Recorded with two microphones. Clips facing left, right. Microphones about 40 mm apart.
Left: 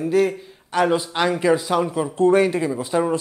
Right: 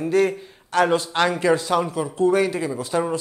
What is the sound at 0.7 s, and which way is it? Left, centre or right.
A man's voice, centre.